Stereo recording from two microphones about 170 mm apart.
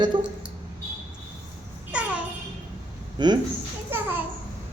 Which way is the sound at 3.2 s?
25° right (ahead or behind).